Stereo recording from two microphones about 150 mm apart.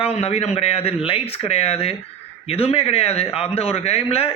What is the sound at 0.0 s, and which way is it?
A man's voice, 40° left (ahead or behind).